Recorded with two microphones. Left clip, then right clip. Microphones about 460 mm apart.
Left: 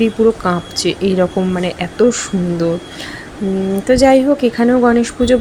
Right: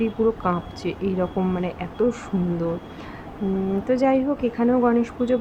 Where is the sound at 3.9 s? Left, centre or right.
Right.